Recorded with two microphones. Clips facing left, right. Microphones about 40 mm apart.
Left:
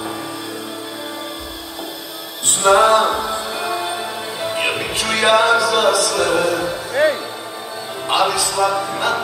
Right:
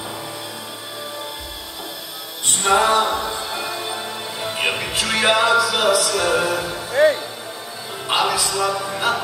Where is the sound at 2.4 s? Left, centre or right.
Centre.